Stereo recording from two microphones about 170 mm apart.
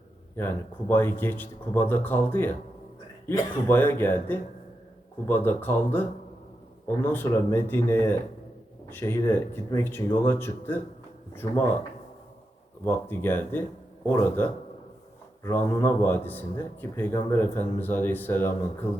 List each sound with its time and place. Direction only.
0.3 s speech: 15° left (ahead or behind)
11.4 s speech: 25° left (ahead or behind)
12.8 s speech: 10° left (ahead or behind)